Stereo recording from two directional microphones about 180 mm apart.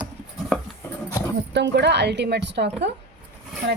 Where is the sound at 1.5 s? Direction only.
75° right (ahead or behind).